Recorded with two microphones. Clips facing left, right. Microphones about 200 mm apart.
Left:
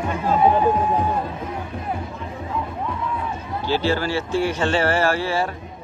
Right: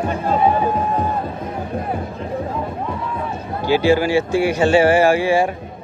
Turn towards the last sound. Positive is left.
turn(degrees=-15)  # may be behind; listen again after turning